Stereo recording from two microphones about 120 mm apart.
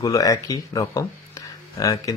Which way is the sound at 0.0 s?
30° left (ahead or behind).